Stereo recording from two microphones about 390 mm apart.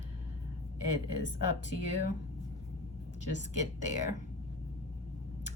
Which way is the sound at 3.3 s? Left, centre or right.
Centre.